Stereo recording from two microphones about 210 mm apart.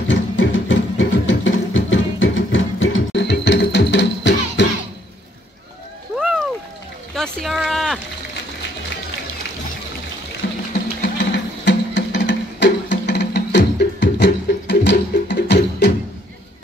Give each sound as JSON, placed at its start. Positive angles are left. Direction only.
{"t": 0.1, "sound": "music", "side_deg": 65}
{"t": 6.1, "sound": "a sound", "side_deg": 0}
{"t": 10.4, "sound": "music", "side_deg": 60}